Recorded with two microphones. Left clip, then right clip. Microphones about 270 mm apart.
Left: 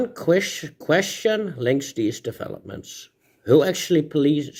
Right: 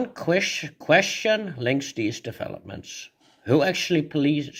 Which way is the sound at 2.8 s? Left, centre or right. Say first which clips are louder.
Right 1 dB; centre.